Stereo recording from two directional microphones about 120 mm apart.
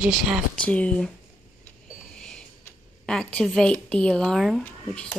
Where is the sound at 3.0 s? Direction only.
5° left (ahead or behind).